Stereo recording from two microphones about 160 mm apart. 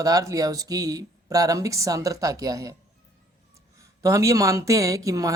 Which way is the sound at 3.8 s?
20° right (ahead or behind).